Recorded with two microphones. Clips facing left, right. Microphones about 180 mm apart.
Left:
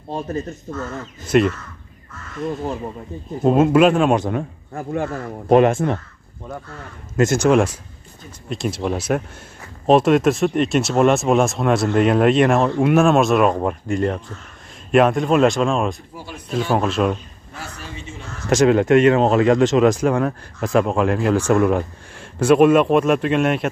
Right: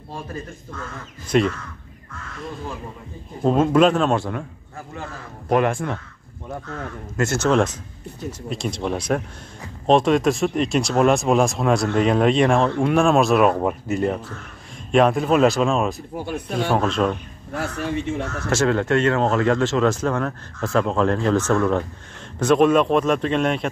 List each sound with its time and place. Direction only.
0.1 s speech: 25° left (ahead or behind)
1.3 s speech: 5° left (ahead or behind)
2.4 s speech: 45° left (ahead or behind)
3.4 s speech: 5° left (ahead or behind)
4.7 s speech: 60° left (ahead or behind)
5.5 s speech: 20° left (ahead or behind)
7.2 s speech: 15° left (ahead or behind); by 16.0 s centre (ahead or behind)
16.2 s speech: 60° right (ahead or behind)
16.6 s speech: 5° left (ahead or behind)
17.6 s speech: 60° right (ahead or behind)
18.5 s speech: 15° left (ahead or behind)